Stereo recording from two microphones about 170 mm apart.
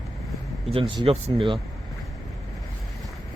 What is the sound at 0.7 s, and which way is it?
Speech, 30° right (ahead or behind).